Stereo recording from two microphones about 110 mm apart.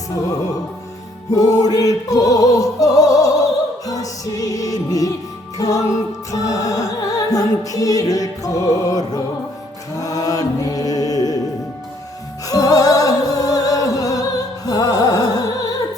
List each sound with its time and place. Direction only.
1.3 s music: 30° left (ahead or behind)
10.0 s mantra: 30° left (ahead or behind)
12.5 s music: 35° left (ahead or behind)